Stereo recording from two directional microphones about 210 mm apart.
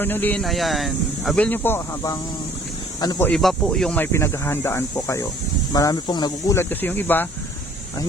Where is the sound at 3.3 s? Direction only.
Centre (ahead or behind).